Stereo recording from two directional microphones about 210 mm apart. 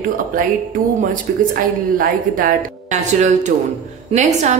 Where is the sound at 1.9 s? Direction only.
40° right (ahead or behind).